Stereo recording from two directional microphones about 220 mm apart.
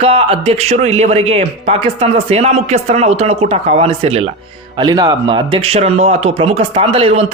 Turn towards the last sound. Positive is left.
turn(degrees=-25)  # may be behind; listen again after turning